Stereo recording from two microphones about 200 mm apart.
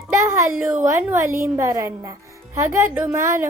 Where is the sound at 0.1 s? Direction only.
15° right (ahead or behind).